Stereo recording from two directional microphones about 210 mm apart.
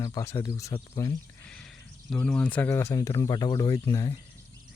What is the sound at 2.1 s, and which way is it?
Speech, 5° left (ahead or behind).